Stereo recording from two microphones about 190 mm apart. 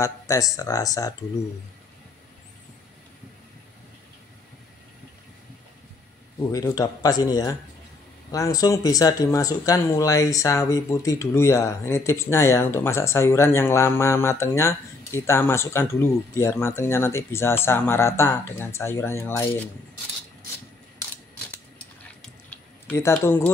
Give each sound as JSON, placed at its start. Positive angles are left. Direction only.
{"t": 0.0, "sound": "speech", "side_deg": 15}
{"t": 6.5, "sound": "speech", "side_deg": 20}
{"t": 22.5, "sound": "a sound", "side_deg": 10}